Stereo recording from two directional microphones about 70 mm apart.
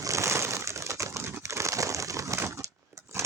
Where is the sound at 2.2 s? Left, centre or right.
Right.